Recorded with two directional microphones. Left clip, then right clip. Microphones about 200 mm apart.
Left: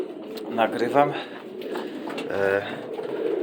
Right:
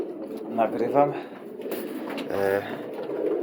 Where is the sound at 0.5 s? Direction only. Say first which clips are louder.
Left 1 dB; 5° left (ahead or behind).